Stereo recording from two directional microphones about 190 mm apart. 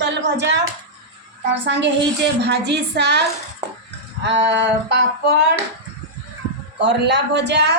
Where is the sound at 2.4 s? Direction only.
65° right (ahead or behind).